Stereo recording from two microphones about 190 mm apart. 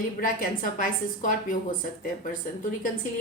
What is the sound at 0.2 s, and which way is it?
A woman's voice, 45° left (ahead or behind).